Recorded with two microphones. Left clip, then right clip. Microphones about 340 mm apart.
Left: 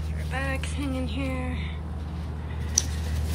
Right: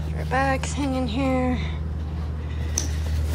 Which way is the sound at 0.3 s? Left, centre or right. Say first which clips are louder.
Right 9 dB; centre.